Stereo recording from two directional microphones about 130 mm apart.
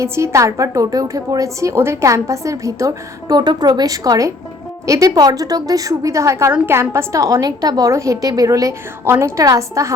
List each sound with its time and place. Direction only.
0.0 s a woman's voice: 20° right (ahead or behind)